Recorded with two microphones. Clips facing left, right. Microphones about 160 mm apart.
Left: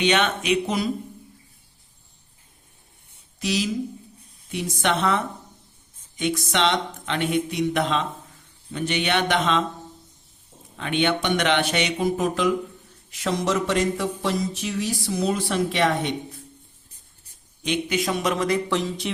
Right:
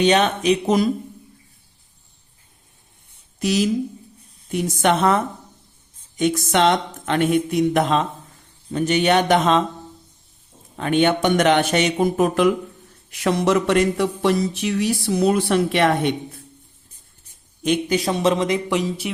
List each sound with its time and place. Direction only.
0.0 s speech: 40° right (ahead or behind)
3.4 s speech: 50° right (ahead or behind)
10.8 s speech: 45° right (ahead or behind)
13.1 s a sound: 65° right (ahead or behind)
17.6 s speech: 45° right (ahead or behind); by 19.1 s 5° right (ahead or behind)